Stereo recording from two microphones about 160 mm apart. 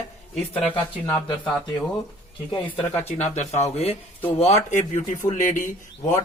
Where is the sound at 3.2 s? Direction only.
45° left (ahead or behind).